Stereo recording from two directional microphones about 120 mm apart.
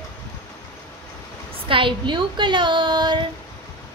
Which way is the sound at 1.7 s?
45° right (ahead or behind).